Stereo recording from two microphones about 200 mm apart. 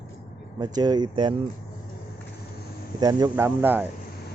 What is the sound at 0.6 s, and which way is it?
Speech, 20° right (ahead or behind).